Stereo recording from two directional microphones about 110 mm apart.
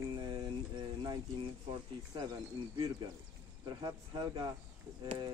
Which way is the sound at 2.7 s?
35° right (ahead or behind).